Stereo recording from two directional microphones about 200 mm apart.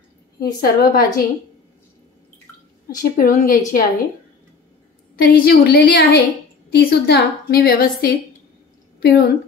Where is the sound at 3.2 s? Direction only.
45° left (ahead or behind).